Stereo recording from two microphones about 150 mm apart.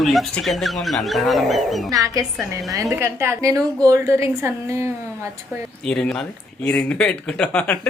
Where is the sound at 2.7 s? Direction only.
20° right (ahead or behind).